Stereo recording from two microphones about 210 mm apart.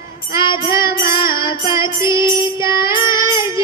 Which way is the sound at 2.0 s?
20° left (ahead or behind).